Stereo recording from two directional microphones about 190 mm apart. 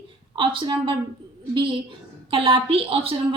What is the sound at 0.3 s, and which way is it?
A woman's voice, 25° right (ahead or behind).